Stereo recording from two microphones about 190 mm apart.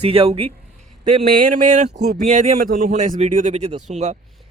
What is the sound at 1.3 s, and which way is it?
Speech, 45° right (ahead or behind).